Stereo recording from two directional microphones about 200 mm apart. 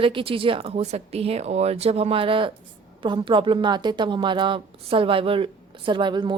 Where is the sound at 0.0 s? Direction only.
25° right (ahead or behind).